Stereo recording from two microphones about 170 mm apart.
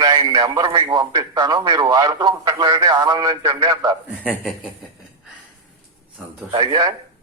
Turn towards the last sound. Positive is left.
turn(degrees=-25)  # may be behind; listen again after turning